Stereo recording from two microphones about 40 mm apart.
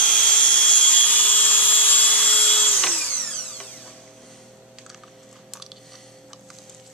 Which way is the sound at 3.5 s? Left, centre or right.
Left.